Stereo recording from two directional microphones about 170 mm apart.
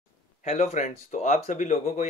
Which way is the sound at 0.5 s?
40° left (ahead or behind).